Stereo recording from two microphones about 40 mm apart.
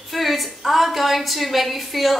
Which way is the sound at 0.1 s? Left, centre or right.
Centre.